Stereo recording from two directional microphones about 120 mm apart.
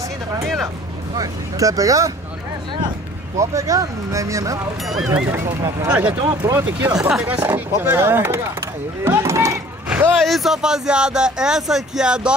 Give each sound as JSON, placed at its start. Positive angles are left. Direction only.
{"t": 1.1, "sound": "speech", "side_deg": -30}
{"t": 3.3, "sound": "speech", "side_deg": -25}
{"t": 4.8, "sound": "speech", "side_deg": 0}
{"t": 5.9, "sound": "speech", "side_deg": -15}
{"t": 6.4, "sound": "speech", "side_deg": -25}
{"t": 7.0, "sound": "speech", "side_deg": -5}
{"t": 9.0, "sound": "a sound", "side_deg": -25}
{"t": 9.8, "sound": "vehicle", "side_deg": -15}
{"t": 10.1, "sound": "speech", "side_deg": 0}